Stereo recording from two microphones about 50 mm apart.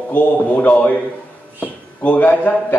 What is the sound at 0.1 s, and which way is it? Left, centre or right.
Speech, left.